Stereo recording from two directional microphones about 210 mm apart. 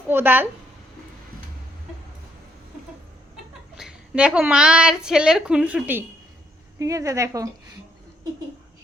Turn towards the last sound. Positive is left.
turn(degrees=-15)  # may be behind; listen again after turning